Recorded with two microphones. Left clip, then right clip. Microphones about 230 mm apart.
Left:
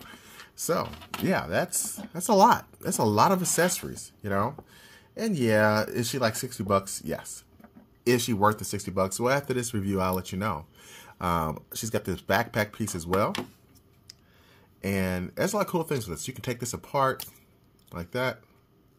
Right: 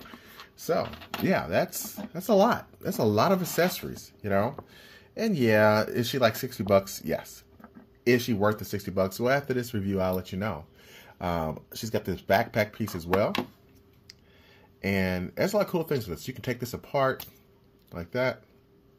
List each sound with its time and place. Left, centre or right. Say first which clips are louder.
0.1 s a sound: even; centre
1.2 s speech: right 1 dB; centre
8.0 s speech: left 1 dB; centre
14.8 s speech: right 1 dB; centre